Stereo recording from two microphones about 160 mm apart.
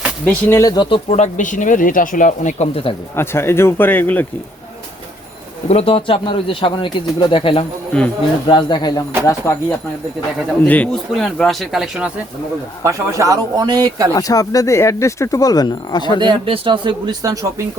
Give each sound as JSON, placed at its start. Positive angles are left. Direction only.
{"t": 0.3, "sound": "speech", "side_deg": 15}
{"t": 1.1, "sound": "speech", "side_deg": 50}
{"t": 3.2, "sound": "speech", "side_deg": 15}
{"t": 5.6, "sound": "speech", "side_deg": 40}
{"t": 10.7, "sound": "speech", "side_deg": 5}
{"t": 12.8, "sound": "speech", "side_deg": -20}
{"t": 14.1, "sound": "speech", "side_deg": 20}
{"t": 16.2, "sound": "speech", "side_deg": -30}